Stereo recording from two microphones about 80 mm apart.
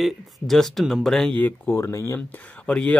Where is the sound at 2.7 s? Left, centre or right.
Centre.